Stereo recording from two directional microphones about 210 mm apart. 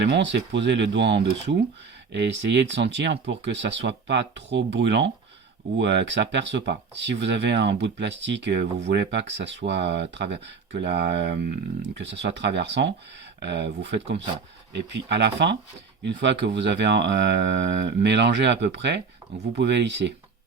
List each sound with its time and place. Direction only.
0.0 s speech: 55° right (ahead or behind)
19.2 s a sound: 15° right (ahead or behind)
19.5 s speech: 55° right (ahead or behind)